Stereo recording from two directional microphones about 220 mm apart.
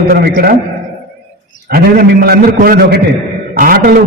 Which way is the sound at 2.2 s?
45° right (ahead or behind).